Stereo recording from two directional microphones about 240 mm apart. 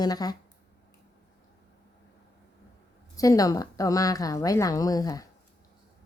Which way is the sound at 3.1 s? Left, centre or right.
Centre.